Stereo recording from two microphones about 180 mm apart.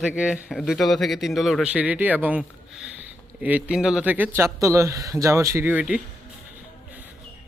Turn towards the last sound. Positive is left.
turn(degrees=-10)  # may be behind; listen again after turning